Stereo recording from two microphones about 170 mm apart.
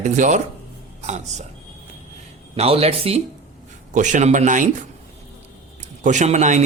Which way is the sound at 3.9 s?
45° right (ahead or behind).